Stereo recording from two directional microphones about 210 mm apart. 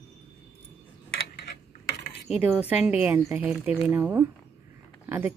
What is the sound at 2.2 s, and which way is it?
Speech, 5° right (ahead or behind).